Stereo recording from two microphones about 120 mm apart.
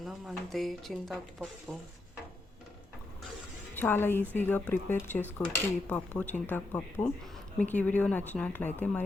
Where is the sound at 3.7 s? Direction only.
15° left (ahead or behind).